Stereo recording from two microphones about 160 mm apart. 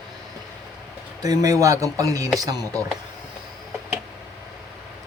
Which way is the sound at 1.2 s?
20° right (ahead or behind).